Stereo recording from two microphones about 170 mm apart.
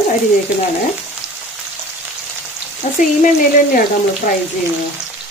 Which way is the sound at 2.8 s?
45° left (ahead or behind).